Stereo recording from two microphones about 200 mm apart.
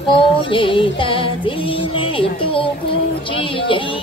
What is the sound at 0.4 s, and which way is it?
Music, 25° left (ahead or behind).